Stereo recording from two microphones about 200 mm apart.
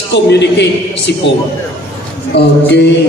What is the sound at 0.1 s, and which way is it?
A man's voice, 60° left (ahead or behind).